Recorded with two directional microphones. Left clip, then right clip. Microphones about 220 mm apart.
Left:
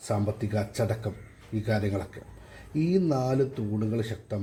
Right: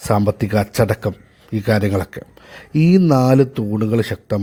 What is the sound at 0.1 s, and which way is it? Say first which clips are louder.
Speech: right 13 dB; 35° right (ahead or behind).